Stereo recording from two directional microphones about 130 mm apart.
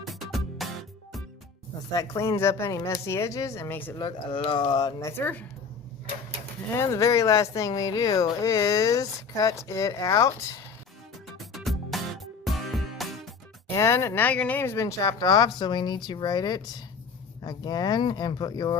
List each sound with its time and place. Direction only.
0.0 s music: centre (ahead or behind)
1.9 s speech: 25° left (ahead or behind)
3.9 s speech: 35° left (ahead or behind)
4.9 s speech: 20° left (ahead or behind)
6.7 s speech: 25° left (ahead or behind)
11.3 s music: centre (ahead or behind)
13.7 s speech: 20° left (ahead or behind)